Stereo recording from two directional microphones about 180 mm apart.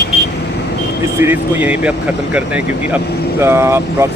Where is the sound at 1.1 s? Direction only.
10° right (ahead or behind).